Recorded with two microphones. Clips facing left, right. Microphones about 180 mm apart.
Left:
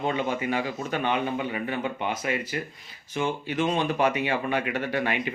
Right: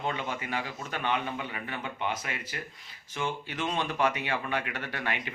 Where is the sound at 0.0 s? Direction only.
15° left (ahead or behind).